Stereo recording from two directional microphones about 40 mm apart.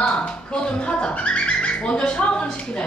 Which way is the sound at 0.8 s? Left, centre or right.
Left.